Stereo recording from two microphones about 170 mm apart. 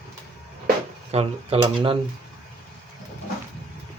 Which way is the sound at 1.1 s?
35° right (ahead or behind).